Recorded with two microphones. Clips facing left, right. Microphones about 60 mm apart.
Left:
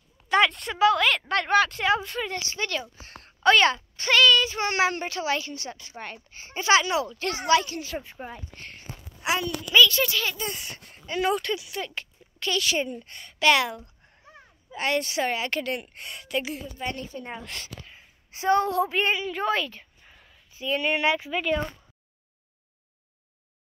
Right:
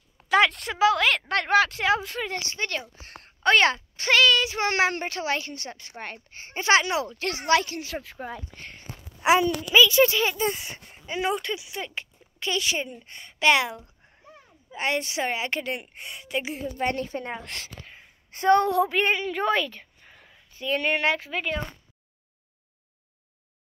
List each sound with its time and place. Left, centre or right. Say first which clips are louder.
0.3 s speech: right 1 dB; right
3.0 s speech: even; right
3.6 s speech: even; right
4.7 s speech: left 2 dB; right
7.2 s speech: even; right
9.2 s a child's voice: right 7 dB; right
10.9 s a woman's voice: left 2 dB; centre
16.7 s speech: right 6 dB; right
18.9 s a woman's voice: right 1 dB; right
20.5 s speech: right 1 dB; right